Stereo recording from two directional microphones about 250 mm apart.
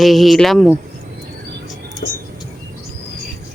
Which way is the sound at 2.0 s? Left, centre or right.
Left.